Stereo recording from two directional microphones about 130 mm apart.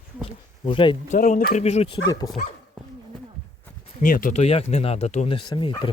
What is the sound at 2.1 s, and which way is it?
Speech, 30° left (ahead or behind).